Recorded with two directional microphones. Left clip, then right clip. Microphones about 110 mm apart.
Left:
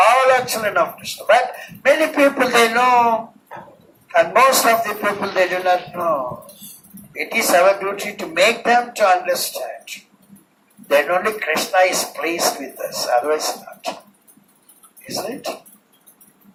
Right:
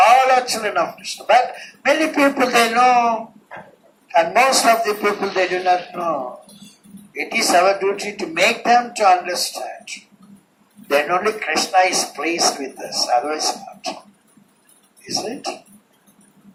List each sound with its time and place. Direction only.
0.0 s a man's voice: 35° left (ahead or behind)
7.1 s a man's voice: 35° left (ahead or behind)
15.0 s a man's voice: 35° left (ahead or behind)